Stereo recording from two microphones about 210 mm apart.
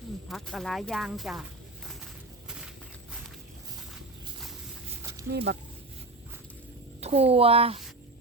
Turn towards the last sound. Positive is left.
turn(degrees=-25)  # may be behind; listen again after turning